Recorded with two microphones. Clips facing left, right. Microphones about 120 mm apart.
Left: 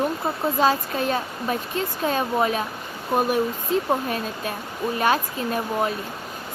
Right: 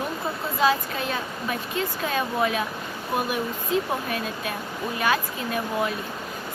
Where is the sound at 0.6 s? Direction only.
40° left (ahead or behind).